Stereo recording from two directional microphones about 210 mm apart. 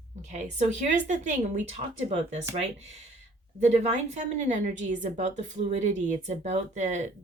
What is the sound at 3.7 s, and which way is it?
A woman's voice, 35° right (ahead or behind).